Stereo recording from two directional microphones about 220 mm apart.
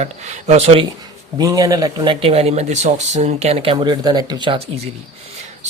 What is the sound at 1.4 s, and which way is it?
Speech, 15° right (ahead or behind).